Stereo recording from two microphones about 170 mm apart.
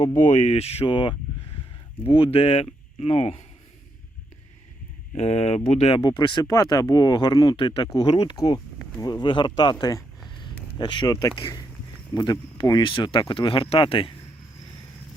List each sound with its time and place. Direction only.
0.2 s speech: 50° left (ahead or behind)
5.1 s speech: 40° left (ahead or behind)
6.0 s speech: 25° left (ahead or behind)
8.4 s speech: 20° left (ahead or behind)